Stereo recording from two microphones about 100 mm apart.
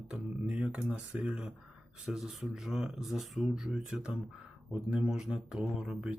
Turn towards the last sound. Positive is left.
turn(degrees=-10)  # may be behind; listen again after turning